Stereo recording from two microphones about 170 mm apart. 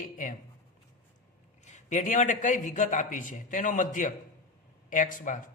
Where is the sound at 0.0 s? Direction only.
50° left (ahead or behind).